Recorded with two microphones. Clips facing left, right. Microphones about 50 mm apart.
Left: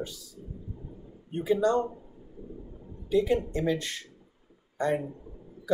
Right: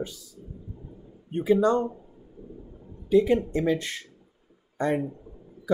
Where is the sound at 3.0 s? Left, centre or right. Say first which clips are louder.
Right 4 dB; right.